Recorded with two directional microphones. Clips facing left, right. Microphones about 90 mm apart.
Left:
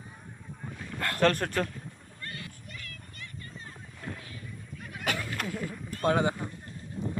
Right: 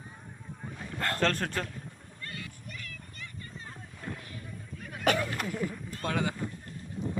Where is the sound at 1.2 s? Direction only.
5° left (ahead or behind).